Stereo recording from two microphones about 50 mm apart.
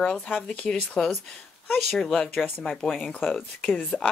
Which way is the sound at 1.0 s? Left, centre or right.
Centre.